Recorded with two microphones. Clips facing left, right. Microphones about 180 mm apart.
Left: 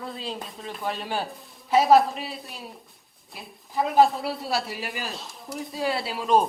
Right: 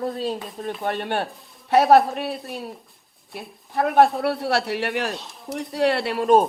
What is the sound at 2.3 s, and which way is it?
Speech, centre (ahead or behind).